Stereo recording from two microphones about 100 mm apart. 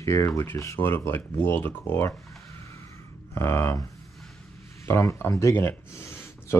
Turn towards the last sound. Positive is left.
turn(degrees=25)  # may be behind; listen again after turning